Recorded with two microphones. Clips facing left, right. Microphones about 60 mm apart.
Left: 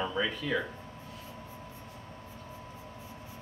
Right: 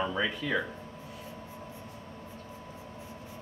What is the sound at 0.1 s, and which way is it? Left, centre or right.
Speech, centre.